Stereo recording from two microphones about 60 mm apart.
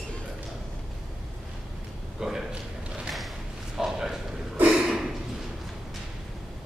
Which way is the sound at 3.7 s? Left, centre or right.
Centre.